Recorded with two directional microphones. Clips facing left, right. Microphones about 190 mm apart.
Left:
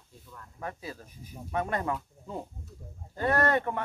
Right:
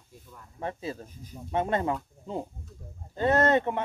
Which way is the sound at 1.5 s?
25° right (ahead or behind).